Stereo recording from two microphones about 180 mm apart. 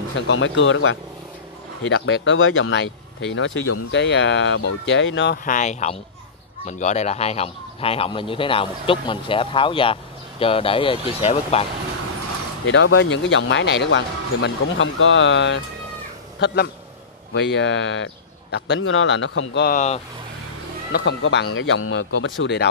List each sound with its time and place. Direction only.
0.3 s speech: 90° left
1.8 s speech: 80° left
5.4 s speech: 45° left (ahead or behind)
12.6 s a man's voice: 90° left
19.7 s speech: 40° left (ahead or behind)
20.9 s speech: 80° left
22.4 s speech: 70° left (ahead or behind)